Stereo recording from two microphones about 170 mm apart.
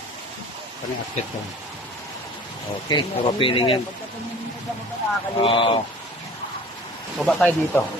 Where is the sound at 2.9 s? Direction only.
25° left (ahead or behind).